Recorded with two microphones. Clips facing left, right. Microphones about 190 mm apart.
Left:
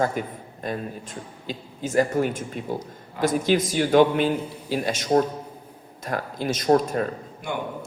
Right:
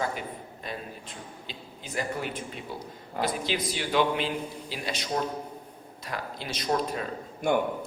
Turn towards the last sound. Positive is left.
turn(degrees=-45)  # may be behind; listen again after turning